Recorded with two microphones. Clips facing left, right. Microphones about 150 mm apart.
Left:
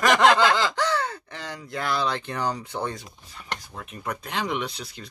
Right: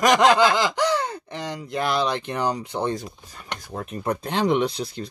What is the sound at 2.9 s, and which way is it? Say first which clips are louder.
Speech: right 8 dB; 40° right (ahead or behind).